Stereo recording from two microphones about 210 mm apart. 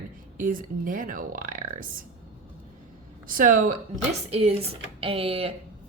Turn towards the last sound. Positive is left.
turn(degrees=-25)  # may be behind; listen again after turning